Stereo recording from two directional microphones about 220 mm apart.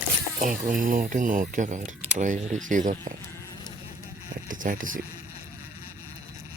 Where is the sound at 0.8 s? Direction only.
40° right (ahead or behind).